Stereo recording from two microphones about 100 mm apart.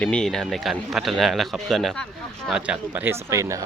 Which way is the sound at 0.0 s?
10° left (ahead or behind).